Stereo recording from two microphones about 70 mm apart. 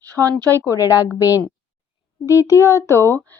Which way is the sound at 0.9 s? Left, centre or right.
Left.